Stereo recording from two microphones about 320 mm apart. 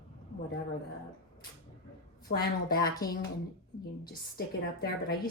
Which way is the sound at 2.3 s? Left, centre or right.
Left.